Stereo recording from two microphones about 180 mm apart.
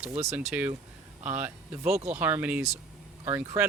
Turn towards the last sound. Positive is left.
turn(degrees=-10)  # may be behind; listen again after turning